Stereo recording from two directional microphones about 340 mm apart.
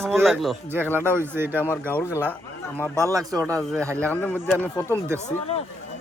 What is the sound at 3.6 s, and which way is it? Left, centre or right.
Speech, centre.